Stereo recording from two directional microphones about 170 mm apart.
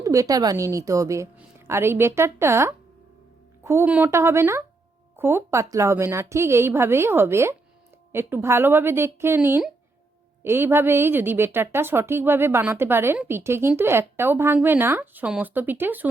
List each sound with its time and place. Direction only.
0.0 s a woman's voice: 20° right (ahead or behind)